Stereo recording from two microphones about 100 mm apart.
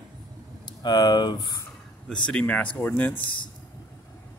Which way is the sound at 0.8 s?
45° left (ahead or behind).